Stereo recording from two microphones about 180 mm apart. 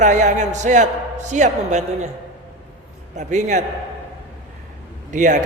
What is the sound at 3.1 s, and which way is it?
Speech, 40° right (ahead or behind).